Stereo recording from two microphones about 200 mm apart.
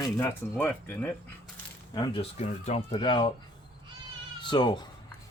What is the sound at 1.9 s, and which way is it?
Speech, 20° left (ahead or behind).